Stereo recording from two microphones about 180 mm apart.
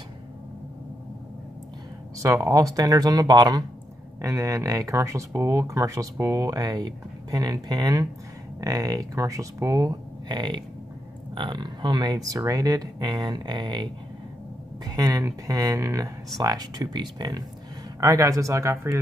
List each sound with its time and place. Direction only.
2.1 s speech: 15° right (ahead or behind)
14.9 s speech: 20° right (ahead or behind)